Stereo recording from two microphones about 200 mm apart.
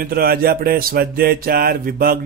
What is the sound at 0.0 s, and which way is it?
Speech, 50° right (ahead or behind).